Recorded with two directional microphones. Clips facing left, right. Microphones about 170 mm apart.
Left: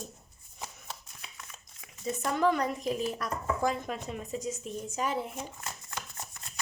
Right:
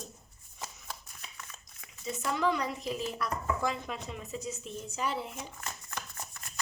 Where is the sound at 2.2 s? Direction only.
50° left (ahead or behind).